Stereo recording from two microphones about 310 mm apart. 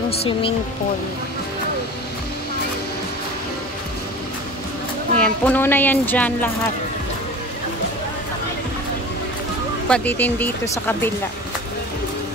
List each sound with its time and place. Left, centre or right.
0.2 s speech: centre
5.2 s speech: centre
9.8 s speech: centre